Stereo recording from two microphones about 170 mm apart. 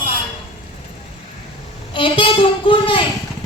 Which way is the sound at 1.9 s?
30° left (ahead or behind).